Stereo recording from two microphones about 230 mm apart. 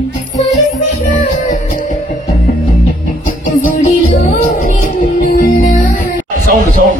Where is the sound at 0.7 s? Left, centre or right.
Left.